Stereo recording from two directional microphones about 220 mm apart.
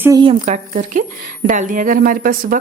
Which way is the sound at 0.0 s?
20° right (ahead or behind).